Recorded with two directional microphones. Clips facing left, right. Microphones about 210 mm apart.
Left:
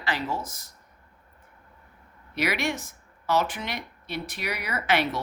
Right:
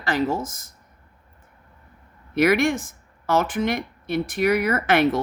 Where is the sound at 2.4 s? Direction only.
50° right (ahead or behind).